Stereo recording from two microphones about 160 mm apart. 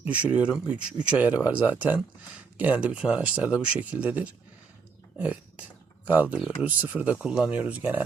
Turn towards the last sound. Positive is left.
turn(degrees=-10)  # may be behind; listen again after turning